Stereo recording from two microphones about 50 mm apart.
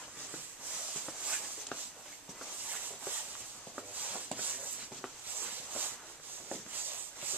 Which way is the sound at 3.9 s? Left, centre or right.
Right.